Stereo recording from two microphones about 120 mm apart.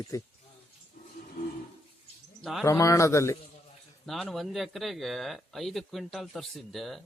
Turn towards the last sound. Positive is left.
turn(degrees=0)  # may be behind; listen again after turning